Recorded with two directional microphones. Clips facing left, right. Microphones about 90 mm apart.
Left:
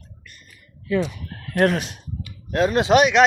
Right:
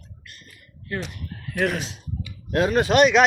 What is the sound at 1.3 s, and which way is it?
Frog, 85° left.